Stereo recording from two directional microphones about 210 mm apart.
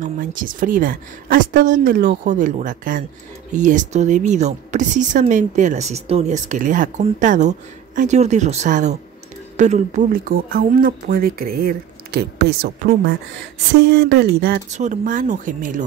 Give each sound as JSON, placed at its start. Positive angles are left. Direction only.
{"t": 0.0, "sound": "speech", "side_deg": -40}
{"t": 14.7, "sound": "speech", "side_deg": -35}